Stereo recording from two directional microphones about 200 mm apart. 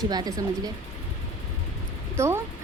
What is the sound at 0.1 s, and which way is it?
Speech, 20° right (ahead or behind).